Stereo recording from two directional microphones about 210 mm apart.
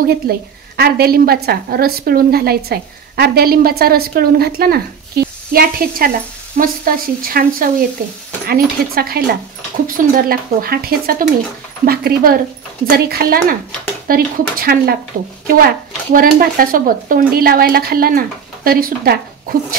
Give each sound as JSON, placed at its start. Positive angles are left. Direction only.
{"t": 0.0, "sound": "a woman's voice", "side_deg": -45}
{"t": 16.1, "sound": "a woman's voice", "side_deg": -45}